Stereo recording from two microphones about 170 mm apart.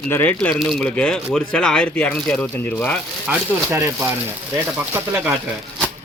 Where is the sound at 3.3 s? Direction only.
10° right (ahead or behind).